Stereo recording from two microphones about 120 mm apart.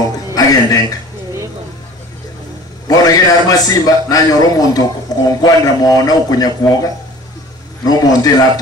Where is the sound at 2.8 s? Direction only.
30° left (ahead or behind).